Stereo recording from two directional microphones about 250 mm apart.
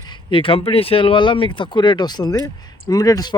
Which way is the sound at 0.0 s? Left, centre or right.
Centre.